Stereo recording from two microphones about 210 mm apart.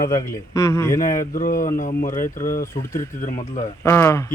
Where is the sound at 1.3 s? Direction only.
40° left (ahead or behind).